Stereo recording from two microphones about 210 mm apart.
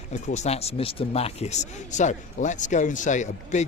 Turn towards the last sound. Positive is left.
turn(degrees=35)  # may be behind; listen again after turning